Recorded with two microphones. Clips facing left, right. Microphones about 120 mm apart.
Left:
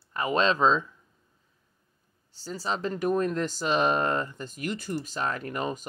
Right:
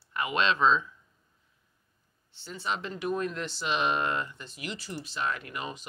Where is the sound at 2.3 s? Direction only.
35° left (ahead or behind).